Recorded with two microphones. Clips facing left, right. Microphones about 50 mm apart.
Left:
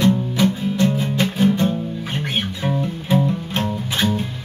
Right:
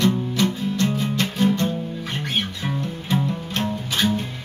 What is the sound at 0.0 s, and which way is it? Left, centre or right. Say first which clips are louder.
Music: left 3 dB; centre.